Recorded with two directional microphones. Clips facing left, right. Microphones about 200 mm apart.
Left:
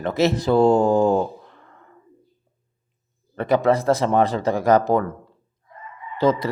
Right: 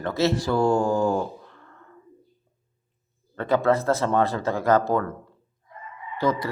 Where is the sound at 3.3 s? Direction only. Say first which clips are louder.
Left 3 dB; 15° left (ahead or behind).